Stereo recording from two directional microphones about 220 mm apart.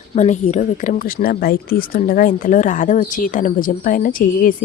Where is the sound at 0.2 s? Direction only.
30° left (ahead or behind).